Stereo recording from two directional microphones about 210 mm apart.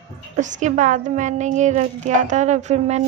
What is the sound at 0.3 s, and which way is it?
A woman's voice, 35° right (ahead or behind).